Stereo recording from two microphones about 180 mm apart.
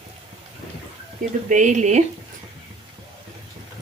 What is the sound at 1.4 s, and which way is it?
Speech, 45° right (ahead or behind).